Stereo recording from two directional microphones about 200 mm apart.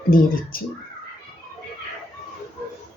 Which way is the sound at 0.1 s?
45° left (ahead or behind).